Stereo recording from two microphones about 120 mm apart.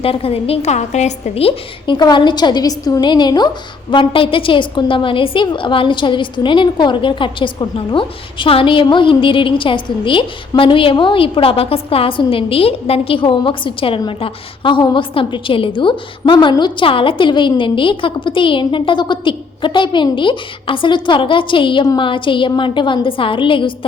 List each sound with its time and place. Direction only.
0.0 s a woman's voice: 50° left (ahead or behind)
2.0 s a woman's voice: 40° left (ahead or behind)
3.9 s a woman's voice: 45° left (ahead or behind)